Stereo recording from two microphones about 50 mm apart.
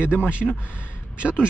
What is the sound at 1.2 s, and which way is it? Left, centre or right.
Speech, centre.